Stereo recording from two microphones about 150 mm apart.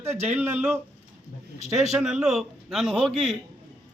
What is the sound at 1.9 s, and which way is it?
A man's voice, 5° right (ahead or behind).